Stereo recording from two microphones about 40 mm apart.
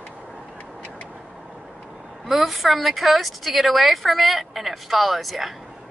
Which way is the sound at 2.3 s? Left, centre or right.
Centre.